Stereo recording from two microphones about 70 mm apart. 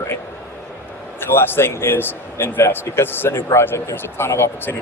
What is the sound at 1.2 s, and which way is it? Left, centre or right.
Speech, left.